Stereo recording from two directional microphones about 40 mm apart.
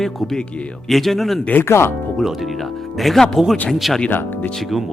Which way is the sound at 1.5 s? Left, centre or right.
Left.